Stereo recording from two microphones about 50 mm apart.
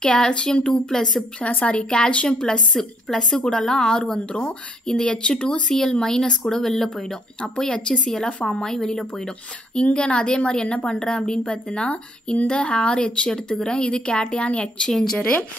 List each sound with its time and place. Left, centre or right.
0.0 s speech: centre
1.5 s a woman's voice: left; by 9.3 s centre
9.8 s a woman's voice: left
14.9 s speech: centre
15.1 s a woman's voice: left